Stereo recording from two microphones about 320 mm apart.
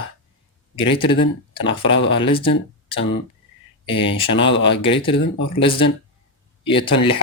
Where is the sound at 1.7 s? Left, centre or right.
Left.